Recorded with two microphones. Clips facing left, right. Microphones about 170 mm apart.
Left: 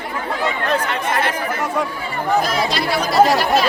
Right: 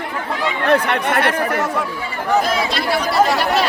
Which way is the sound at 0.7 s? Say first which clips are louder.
Right 8 dB; 65° right (ahead or behind).